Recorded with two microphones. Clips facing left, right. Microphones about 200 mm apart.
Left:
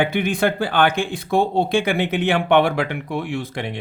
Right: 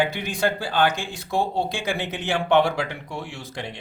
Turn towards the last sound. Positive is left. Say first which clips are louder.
# left 8 dB
turn(degrees=55)  # may be behind; listen again after turning